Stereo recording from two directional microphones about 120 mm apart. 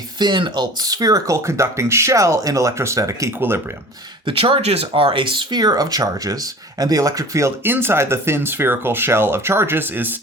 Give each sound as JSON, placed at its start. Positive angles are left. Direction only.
{"t": 0.2, "sound": "speech", "side_deg": -40}
{"t": 4.3, "sound": "speech", "side_deg": -50}